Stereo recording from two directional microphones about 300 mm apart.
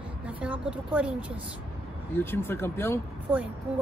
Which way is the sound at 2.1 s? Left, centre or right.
Centre.